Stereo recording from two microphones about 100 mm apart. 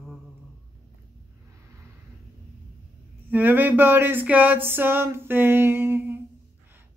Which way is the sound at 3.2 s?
15° right (ahead or behind).